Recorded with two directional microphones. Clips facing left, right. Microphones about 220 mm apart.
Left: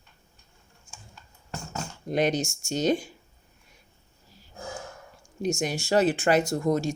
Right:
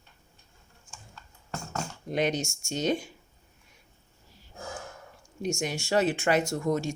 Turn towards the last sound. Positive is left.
turn(degrees=35)  # may be behind; listen again after turning